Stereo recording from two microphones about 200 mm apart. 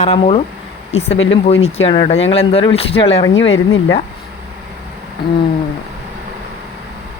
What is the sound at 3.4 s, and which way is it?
Speech, 75° left (ahead or behind).